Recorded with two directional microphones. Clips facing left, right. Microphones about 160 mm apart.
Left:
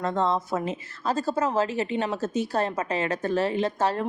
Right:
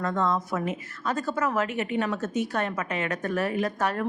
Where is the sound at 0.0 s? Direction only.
30° left (ahead or behind).